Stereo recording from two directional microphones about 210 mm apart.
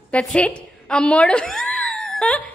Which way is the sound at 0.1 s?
5° left (ahead or behind).